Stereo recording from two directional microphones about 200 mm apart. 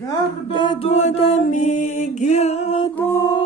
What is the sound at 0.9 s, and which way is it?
Music, 35° left (ahead or behind).